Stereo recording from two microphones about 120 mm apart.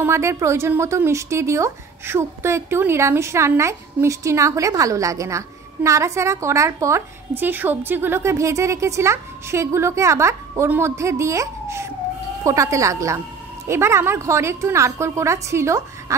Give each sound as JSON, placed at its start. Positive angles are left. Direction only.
{"t": 0.0, "sound": "a woman's voice", "side_deg": -25}